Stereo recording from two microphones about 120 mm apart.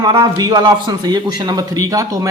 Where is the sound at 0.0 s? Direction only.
40° right (ahead or behind).